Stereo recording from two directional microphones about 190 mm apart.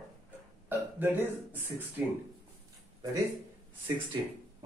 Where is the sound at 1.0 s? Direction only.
10° right (ahead or behind).